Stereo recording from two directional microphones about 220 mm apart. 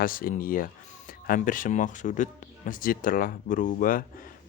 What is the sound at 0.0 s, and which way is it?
A man's voice, 40° left (ahead or behind).